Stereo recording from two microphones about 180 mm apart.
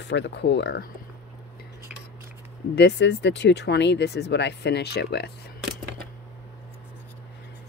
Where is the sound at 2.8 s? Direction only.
70° left (ahead or behind).